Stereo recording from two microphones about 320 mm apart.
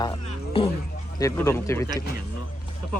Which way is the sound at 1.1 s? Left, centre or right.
Centre.